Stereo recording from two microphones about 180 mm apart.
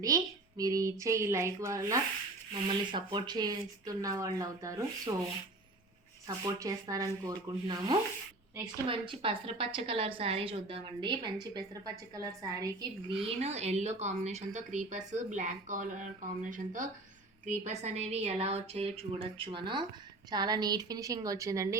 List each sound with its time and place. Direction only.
0.0 s speech: 20° right (ahead or behind)
6.2 s speech: 20° right (ahead or behind)
13.2 s speech: 35° right (ahead or behind); by 21.8 s 15° right (ahead or behind)